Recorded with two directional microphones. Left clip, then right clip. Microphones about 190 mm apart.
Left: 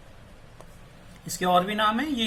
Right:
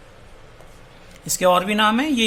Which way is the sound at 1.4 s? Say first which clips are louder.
Right 6 dB; 70° right (ahead or behind).